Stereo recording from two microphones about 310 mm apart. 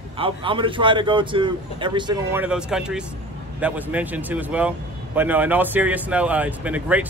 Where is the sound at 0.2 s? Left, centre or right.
Centre.